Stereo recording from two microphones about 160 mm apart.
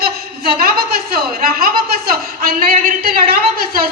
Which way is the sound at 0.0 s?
75° right (ahead or behind).